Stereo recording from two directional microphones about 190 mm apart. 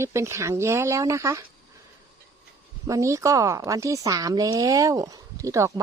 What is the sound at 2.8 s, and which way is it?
Speech, 15° right (ahead or behind).